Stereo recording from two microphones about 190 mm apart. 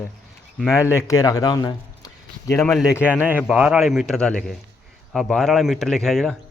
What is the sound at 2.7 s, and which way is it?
A man's voice, 5° right (ahead or behind).